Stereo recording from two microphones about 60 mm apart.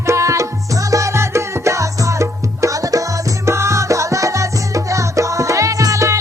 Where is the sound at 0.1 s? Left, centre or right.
Right.